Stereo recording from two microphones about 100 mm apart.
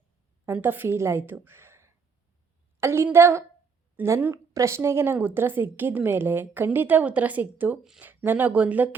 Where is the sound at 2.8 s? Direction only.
25° right (ahead or behind).